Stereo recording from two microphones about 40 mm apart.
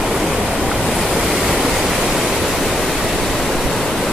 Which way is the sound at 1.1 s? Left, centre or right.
Centre.